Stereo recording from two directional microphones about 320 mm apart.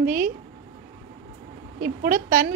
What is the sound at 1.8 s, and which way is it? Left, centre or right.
Speech, right.